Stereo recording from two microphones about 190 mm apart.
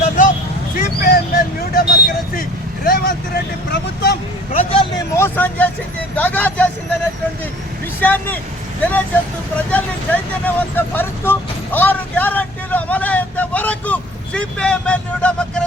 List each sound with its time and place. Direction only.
0.8 s vehicle: 50° left (ahead or behind)
4.5 s speech: 30° left (ahead or behind)
5.1 s speech: 10° left (ahead or behind)
8.0 s speech: 10° left (ahead or behind)
10.4 s speech: 10° left (ahead or behind)